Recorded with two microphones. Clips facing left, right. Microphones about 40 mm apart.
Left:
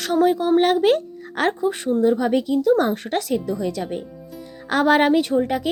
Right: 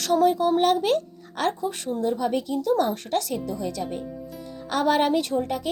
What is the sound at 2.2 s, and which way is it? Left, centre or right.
Speech, left.